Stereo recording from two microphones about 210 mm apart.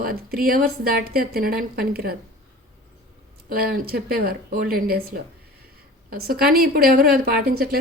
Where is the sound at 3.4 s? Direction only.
45° right (ahead or behind).